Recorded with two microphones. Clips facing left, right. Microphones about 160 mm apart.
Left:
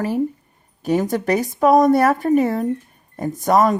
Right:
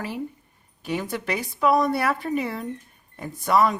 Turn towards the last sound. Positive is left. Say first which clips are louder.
# left 5 dB
turn(degrees=45)  # may be behind; listen again after turning